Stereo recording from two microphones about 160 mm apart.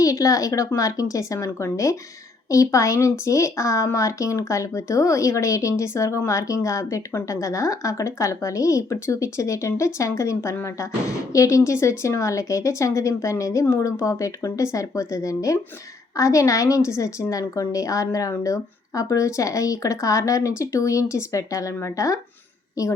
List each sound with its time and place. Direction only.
0.0 s speech: 20° left (ahead or behind)